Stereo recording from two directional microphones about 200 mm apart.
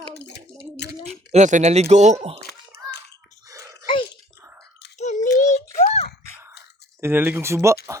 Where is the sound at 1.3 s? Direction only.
35° right (ahead or behind).